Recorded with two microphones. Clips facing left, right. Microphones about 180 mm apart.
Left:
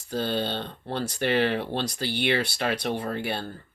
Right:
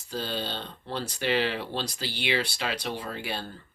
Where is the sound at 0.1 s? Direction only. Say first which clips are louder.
Left 5 dB; 55° left (ahead or behind).